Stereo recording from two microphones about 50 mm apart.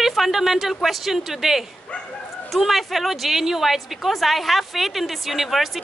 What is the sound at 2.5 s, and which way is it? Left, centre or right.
A woman's voice, centre.